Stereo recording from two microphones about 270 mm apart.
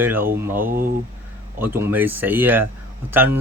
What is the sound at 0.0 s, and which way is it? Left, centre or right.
Speech, centre.